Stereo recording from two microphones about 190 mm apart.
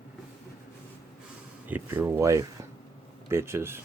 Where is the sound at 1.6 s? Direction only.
10° right (ahead or behind).